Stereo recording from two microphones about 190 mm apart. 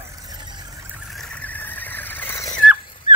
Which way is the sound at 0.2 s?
20° right (ahead or behind).